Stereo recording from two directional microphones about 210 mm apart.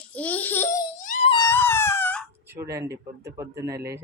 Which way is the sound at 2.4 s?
15° right (ahead or behind).